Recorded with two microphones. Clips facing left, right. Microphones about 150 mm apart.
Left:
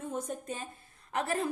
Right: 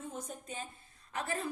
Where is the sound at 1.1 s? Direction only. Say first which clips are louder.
Left 5 dB; 65° left (ahead or behind).